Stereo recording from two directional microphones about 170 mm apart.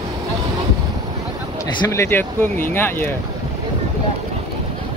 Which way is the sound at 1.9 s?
15° left (ahead or behind).